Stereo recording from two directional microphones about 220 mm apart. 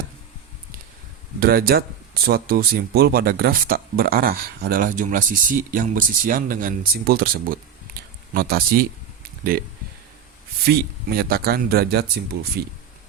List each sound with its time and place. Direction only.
1.4 s speech: 45° right (ahead or behind)
10.7 s speech: 45° right (ahead or behind)